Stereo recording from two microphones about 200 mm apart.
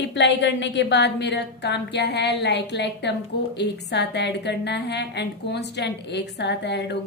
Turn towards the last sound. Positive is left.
turn(degrees=60)  # may be behind; listen again after turning